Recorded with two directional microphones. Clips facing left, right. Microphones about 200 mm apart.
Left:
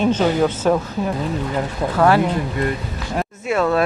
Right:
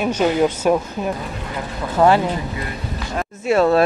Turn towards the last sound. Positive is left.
turn(degrees=-35)  # may be behind; listen again after turning